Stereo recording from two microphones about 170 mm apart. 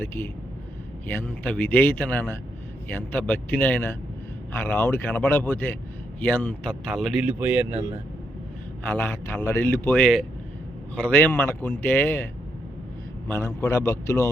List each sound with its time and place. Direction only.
0.0 s a man's voice: 10° left (ahead or behind); by 7.8 s 10° right (ahead or behind)
8.9 s a man's voice: 10° left (ahead or behind)